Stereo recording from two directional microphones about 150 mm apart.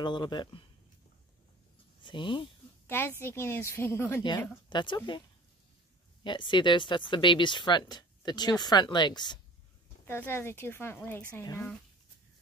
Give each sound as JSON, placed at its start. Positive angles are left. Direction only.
{"t": 0.0, "sound": "speech", "side_deg": 30}
{"t": 2.0, "sound": "speech", "side_deg": 30}
{"t": 2.9, "sound": "a woman's voice", "side_deg": 15}
{"t": 4.6, "sound": "speech", "side_deg": 30}
{"t": 6.2, "sound": "speech", "side_deg": 30}
{"t": 10.0, "sound": "a woman's voice", "side_deg": 15}